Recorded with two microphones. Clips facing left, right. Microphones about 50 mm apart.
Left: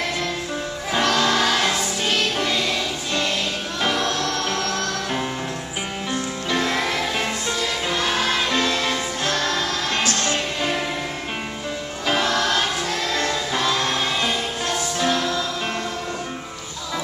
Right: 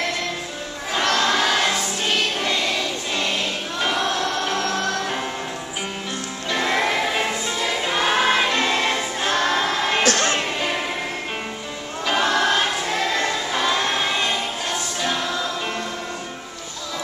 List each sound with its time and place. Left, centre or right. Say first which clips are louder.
0.9 s choir: even; centre
3.8 s music: even; centre
6.5 s music: right 2 dB; centre
10.0 s music: right 3 dB; right
12.1 s choir: right 1 dB; centre